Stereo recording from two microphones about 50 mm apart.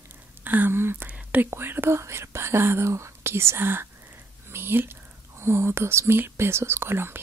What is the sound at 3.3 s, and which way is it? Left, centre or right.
Speech, right.